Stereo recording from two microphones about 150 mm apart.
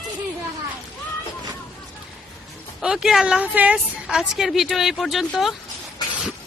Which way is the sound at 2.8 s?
5° right (ahead or behind).